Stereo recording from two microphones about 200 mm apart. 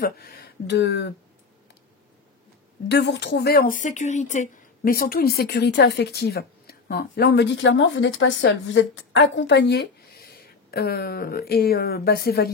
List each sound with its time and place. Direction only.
0.0 s speech: 50° left (ahead or behind)
2.9 s speech: 55° left (ahead or behind)